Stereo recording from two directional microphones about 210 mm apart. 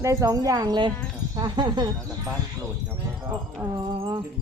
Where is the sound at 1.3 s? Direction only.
20° right (ahead or behind).